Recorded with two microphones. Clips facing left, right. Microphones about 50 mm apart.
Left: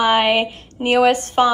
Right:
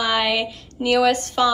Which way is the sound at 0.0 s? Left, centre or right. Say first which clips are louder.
Left 5 dB; left.